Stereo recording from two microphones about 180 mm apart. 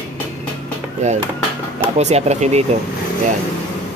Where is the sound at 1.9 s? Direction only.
35° right (ahead or behind).